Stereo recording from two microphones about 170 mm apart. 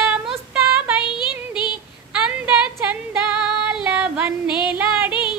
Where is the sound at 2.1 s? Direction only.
5° right (ahead or behind).